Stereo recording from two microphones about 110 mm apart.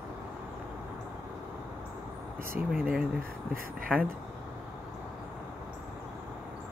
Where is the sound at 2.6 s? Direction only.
10° right (ahead or behind).